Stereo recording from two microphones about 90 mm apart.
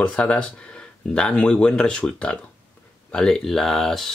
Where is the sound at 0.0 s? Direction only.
10° left (ahead or behind).